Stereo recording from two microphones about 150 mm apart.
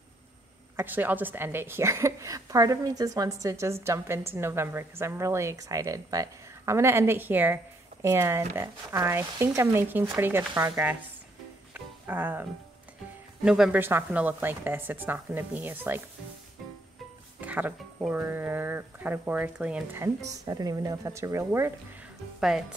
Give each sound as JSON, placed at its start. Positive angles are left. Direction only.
{"t": 0.7, "sound": "a woman's voice", "side_deg": -10}
{"t": 11.7, "sound": "music", "side_deg": -10}
{"t": 13.4, "sound": "a woman's voice", "side_deg": -5}
{"t": 17.4, "sound": "a woman's voice", "side_deg": -10}
{"t": 20.2, "sound": "speech", "side_deg": -25}